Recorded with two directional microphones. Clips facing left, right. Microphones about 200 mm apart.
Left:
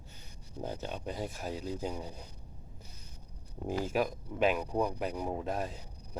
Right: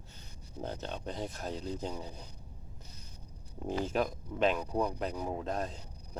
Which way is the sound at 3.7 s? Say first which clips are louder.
Even; 5° left (ahead or behind).